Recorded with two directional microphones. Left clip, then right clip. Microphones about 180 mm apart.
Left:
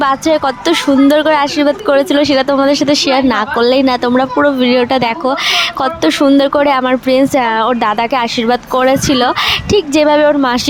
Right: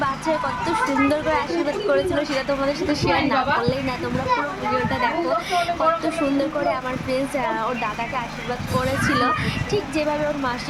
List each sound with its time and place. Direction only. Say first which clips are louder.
0.0 s speech: left 11 dB; 55° left (ahead or behind)